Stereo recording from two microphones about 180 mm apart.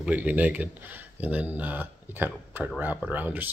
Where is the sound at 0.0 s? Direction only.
10° right (ahead or behind).